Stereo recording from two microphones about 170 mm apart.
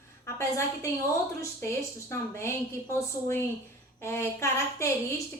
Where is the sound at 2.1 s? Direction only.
15° left (ahead or behind).